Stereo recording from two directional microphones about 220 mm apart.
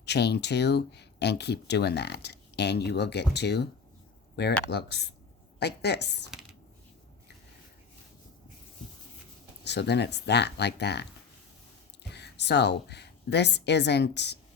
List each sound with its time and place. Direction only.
0.0 s speech: 50° left (ahead or behind)
9.6 s speech: 50° left (ahead or behind)
12.1 s a woman's voice: 50° left (ahead or behind)